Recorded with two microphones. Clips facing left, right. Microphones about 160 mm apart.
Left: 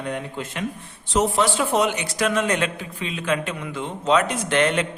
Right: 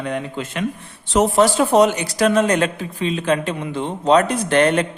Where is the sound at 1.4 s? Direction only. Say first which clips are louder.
Right 10 dB; 40° right (ahead or behind).